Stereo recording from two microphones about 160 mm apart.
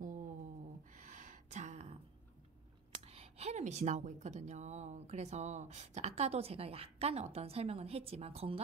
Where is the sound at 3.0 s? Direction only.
40° right (ahead or behind).